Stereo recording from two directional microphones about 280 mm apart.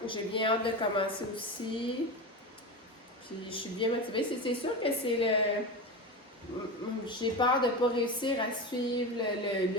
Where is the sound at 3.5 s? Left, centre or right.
Centre.